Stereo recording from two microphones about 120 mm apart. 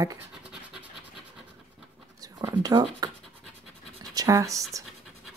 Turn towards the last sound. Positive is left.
turn(degrees=-25)  # may be behind; listen again after turning